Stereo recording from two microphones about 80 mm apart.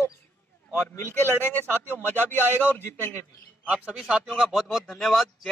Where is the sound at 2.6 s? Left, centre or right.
Left.